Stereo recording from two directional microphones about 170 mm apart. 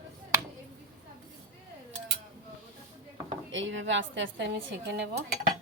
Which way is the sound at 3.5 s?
90° right.